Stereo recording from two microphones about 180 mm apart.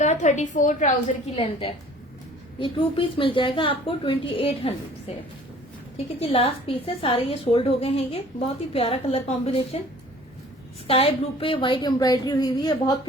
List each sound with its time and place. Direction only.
0.0 s a woman's voice: 40° left (ahead or behind)
6.1 s a woman's voice: 35° left (ahead or behind)
10.8 s a woman's voice: 30° left (ahead or behind)